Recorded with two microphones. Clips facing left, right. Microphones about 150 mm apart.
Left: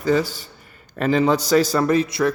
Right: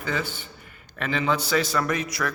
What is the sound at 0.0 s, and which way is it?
Speech, 40° left (ahead or behind).